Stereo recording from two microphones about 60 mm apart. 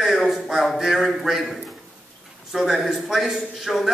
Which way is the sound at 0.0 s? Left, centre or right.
Centre.